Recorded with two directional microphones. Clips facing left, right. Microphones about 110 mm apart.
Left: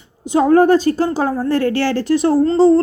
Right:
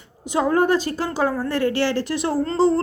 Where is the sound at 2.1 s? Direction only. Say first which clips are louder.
Left 9 dB; 30° left (ahead or behind).